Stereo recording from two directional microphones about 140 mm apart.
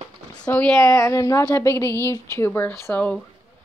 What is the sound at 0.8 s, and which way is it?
A woman's voice, 20° left (ahead or behind).